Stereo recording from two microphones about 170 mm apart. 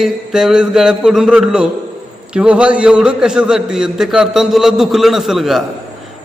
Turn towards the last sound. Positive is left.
turn(degrees=0)  # may be behind; listen again after turning